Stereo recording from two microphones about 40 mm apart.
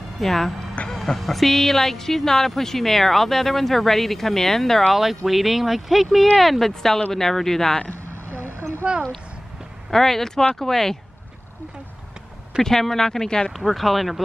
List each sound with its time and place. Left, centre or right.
0.2 s speech: centre
4.9 s speech: centre
8.3 s vehicle: right
9.8 s speech: centre
12.6 s speech: centre
13.5 s speech: centre